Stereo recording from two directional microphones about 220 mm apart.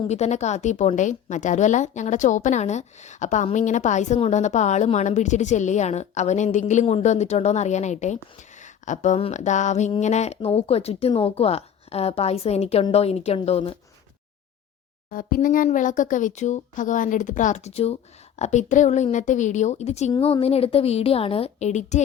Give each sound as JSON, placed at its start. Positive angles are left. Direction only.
{"t": 0.1, "sound": "a woman's voice", "side_deg": 30}
{"t": 15.1, "sound": "a woman's voice", "side_deg": 40}